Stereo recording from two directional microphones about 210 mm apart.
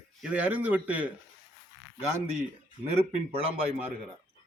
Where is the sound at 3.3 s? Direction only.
25° right (ahead or behind).